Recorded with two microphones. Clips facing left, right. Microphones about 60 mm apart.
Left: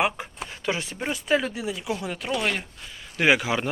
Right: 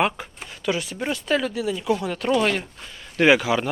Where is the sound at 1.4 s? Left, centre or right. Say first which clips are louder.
Right 4 dB; left.